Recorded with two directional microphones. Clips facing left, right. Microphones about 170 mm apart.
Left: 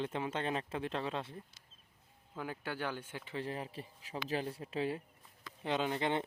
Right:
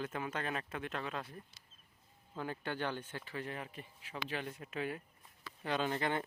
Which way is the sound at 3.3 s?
30° left (ahead or behind).